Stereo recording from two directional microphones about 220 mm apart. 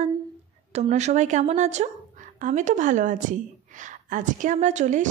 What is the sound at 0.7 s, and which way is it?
A woman's voice, 30° right (ahead or behind).